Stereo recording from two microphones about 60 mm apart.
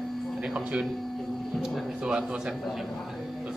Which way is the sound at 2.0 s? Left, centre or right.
Centre.